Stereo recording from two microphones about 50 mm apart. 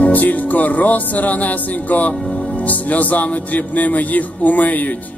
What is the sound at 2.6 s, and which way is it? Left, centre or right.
Speech, left.